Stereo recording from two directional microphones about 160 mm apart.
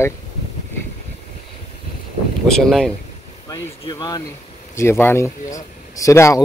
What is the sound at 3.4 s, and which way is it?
Vehicle, 25° left (ahead or behind).